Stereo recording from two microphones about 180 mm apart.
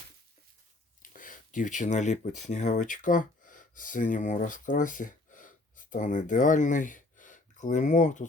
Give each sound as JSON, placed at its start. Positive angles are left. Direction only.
{"t": 1.1, "sound": "speech", "side_deg": 45}